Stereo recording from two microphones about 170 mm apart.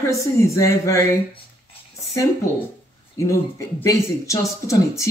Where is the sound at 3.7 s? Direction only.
20° left (ahead or behind).